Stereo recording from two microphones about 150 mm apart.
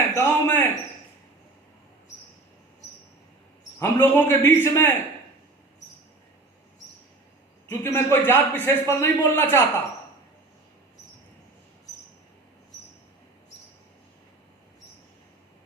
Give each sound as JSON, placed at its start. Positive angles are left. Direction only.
{"t": 0.2, "sound": "a sound", "side_deg": 15}
{"t": 3.8, "sound": "a man's voice", "side_deg": 15}
{"t": 7.7, "sound": "a man's voice", "side_deg": 15}